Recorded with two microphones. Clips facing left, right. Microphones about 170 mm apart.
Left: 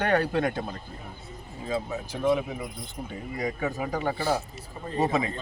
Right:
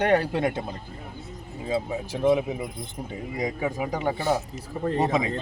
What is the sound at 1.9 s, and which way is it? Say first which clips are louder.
Speech: right 3 dB; 20° right (ahead or behind).